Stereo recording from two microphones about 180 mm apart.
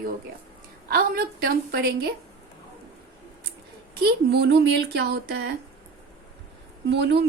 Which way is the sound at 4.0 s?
65° right (ahead or behind).